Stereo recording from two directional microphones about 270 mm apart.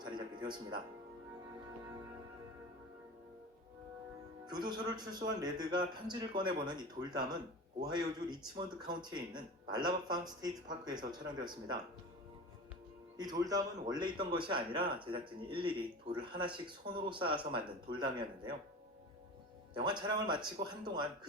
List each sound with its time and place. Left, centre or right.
0.0 s music: centre
4.5 s a man's voice: centre
13.1 s a man's voice: centre
19.7 s a man's voice: centre